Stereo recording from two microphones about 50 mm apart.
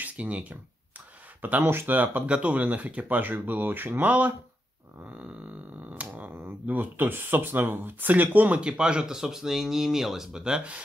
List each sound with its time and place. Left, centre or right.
0.0 s speech: right
2.2 s speech: right
3.2 s speech: right
5.0 s speech: right
5.9 s music: right
6.3 s speech: right
8.5 s speech: centre